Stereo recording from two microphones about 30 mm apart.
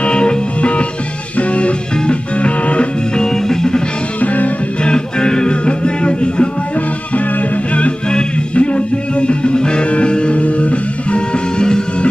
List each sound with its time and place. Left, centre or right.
0.0 s music: left
0.6 s music: left
4.2 s music: left
4.8 s music: left
8.5 s music: left
10.4 s music: left